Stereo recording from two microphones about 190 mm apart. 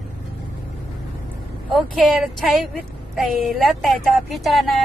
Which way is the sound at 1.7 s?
Centre (ahead or behind).